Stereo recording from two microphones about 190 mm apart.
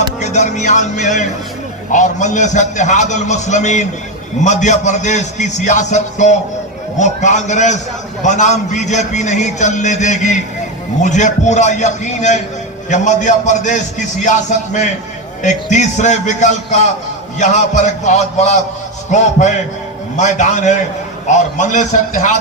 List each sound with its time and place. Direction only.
0.2 s a man's voice: 40° left (ahead or behind)
15.4 s a man's voice: 40° left (ahead or behind)